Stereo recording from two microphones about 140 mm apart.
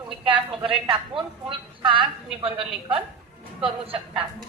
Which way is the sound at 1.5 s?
35° right (ahead or behind).